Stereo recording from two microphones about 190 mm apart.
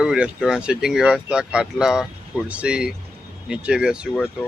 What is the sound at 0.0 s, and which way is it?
Speech, 5° right (ahead or behind).